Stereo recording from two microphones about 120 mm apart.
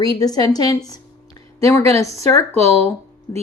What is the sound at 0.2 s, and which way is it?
Speech, 35° left (ahead or behind).